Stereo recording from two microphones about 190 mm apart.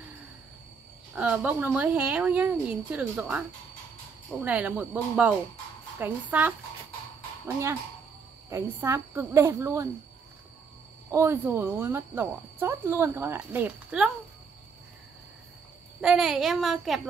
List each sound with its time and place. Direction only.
1.1 s speech: 5° right (ahead or behind)
8.5 s speech: 15° right (ahead or behind)
11.1 s speech: 15° right (ahead or behind)
16.0 s a child's voice: 5° right (ahead or behind)